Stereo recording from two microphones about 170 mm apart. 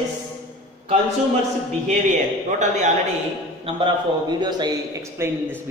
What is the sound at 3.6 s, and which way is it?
A man's voice, 30° right (ahead or behind).